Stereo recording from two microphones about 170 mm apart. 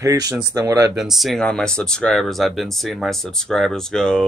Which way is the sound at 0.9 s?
Centre (ahead or behind).